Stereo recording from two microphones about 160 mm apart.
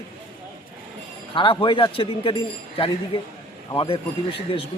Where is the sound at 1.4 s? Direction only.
30° left (ahead or behind).